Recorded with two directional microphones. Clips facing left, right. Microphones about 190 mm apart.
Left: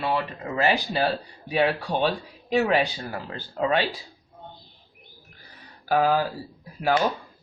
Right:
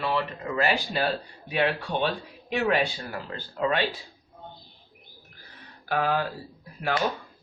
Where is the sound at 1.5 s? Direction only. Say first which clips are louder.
Left 3 dB; 40° left (ahead or behind).